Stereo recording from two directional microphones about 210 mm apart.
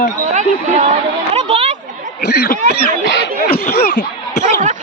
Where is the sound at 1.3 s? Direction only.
30° right (ahead or behind).